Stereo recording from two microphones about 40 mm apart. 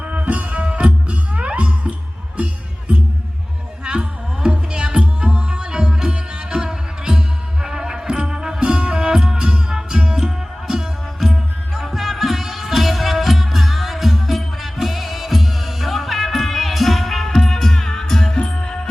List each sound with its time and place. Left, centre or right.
0.0 s music: right
3.8 s music: right; by 18.3 s centre
18.3 s music: centre